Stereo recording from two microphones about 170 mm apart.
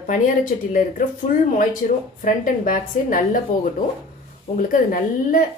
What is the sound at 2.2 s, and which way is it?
A woman's voice, 50° left (ahead or behind).